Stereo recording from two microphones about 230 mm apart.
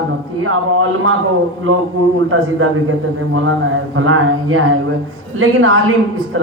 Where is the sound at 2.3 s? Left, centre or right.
Right.